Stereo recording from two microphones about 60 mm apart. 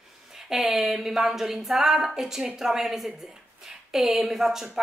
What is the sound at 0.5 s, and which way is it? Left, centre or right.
Speech, centre.